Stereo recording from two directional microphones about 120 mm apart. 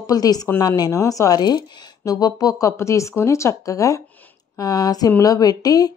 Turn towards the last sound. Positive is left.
turn(degrees=30)  # may be behind; listen again after turning